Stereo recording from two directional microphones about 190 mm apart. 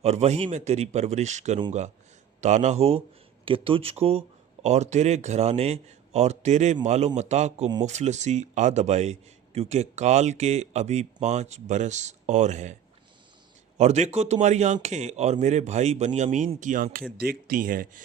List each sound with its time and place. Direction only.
0.0 s a man's voice: 35° right (ahead or behind)
13.7 s a man's voice: 35° right (ahead or behind)